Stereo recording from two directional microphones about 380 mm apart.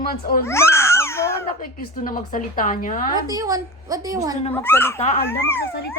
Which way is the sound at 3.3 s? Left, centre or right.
Centre.